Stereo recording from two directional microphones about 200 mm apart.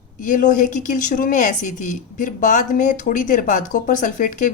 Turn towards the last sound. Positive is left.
turn(degrees=40)  # may be behind; listen again after turning